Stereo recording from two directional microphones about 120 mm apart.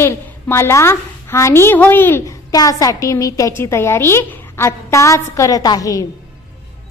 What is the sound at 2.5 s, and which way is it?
A woman's voice, 30° left (ahead or behind).